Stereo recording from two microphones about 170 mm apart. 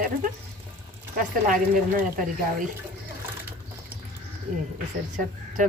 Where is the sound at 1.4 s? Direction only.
50° right (ahead or behind).